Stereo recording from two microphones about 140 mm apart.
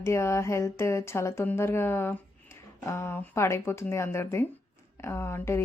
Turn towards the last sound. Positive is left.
turn(degrees=20)  # may be behind; listen again after turning